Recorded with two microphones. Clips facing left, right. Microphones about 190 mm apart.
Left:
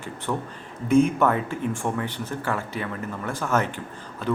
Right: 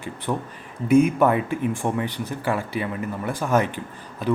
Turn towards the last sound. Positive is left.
turn(degrees=-15)  # may be behind; listen again after turning